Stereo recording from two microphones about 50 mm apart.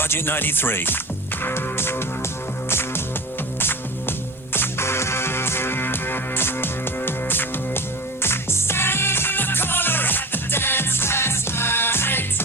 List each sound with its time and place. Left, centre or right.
0.0 s speech: left
1.4 s music: left